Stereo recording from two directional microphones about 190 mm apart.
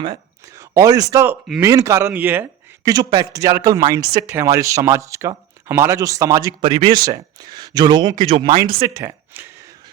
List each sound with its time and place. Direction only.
0.0 s speech: 20° right (ahead or behind)
6.6 s speech: 30° right (ahead or behind); by 9.5 s 10° right (ahead or behind)